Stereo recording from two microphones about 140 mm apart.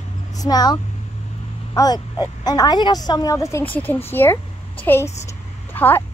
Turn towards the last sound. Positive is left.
turn(degrees=15)  # may be behind; listen again after turning